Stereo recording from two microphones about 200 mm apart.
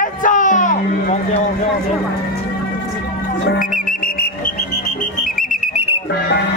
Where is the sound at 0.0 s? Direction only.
40° left (ahead or behind).